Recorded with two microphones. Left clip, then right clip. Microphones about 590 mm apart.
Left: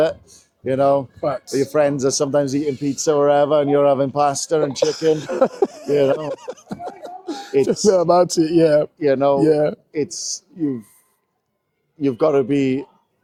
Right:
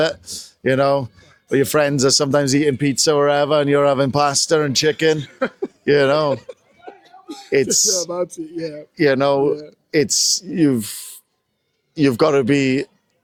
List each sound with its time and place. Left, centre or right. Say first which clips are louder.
0.0 s speech: left 1 dB; right
5.2 s a man's voice: left 7 dB; left
5.9 s speech: right 3 dB; right
6.3 s speech: right 4 dB; left
7.3 s a sound: left 5 dB; left
7.5 s speech: right 1 dB; right
8.0 s a man's voice: left 10 dB; left
9.0 s speech: right 1 dB; right
11.9 s speech: right 2 dB; right